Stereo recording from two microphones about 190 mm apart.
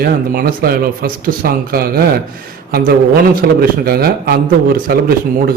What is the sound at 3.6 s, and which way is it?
A man's voice, 55° right (ahead or behind).